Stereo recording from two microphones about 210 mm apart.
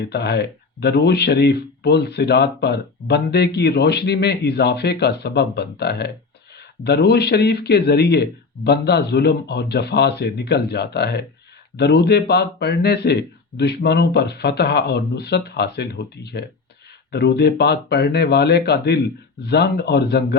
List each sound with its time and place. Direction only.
0.0 s speech: 50° left (ahead or behind)